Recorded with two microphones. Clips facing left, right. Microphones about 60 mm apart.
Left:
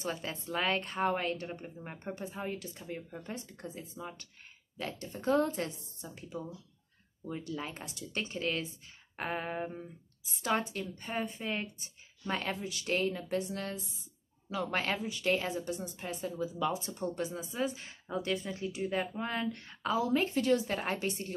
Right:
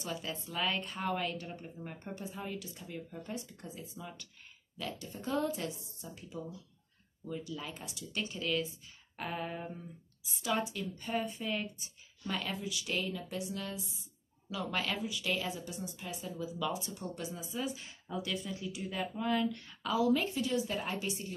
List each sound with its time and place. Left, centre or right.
0.0 s speech: left
7.4 s speech: left
20.4 s a woman's voice: left